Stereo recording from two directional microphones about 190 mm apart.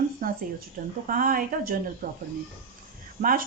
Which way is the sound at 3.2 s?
50° right (ahead or behind).